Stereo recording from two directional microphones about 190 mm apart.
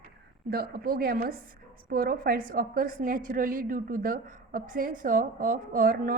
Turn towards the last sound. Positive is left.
turn(degrees=-50)  # may be behind; listen again after turning